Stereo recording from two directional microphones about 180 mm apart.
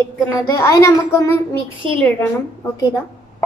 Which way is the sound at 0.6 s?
15° left (ahead or behind).